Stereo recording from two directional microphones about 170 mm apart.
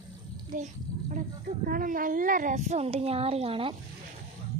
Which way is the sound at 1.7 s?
55° right (ahead or behind).